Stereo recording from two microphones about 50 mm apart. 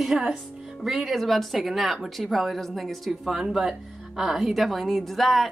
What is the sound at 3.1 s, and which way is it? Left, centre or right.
A woman's voice, centre.